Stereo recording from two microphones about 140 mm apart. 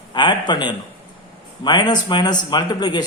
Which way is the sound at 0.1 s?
35° left (ahead or behind).